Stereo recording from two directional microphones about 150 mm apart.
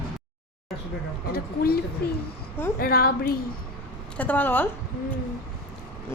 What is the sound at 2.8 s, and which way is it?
Speech, 90° left.